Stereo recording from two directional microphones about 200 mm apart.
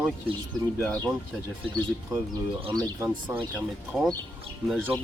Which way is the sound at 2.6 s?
20° right (ahead or behind).